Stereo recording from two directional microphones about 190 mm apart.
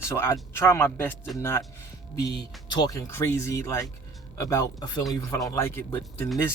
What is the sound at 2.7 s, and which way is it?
Speech, 20° left (ahead or behind).